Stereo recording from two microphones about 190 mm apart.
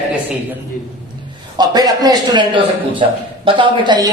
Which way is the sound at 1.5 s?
20° right (ahead or behind).